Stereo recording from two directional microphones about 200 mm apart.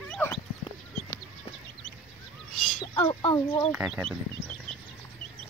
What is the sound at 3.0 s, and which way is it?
Speech, 25° left (ahead or behind).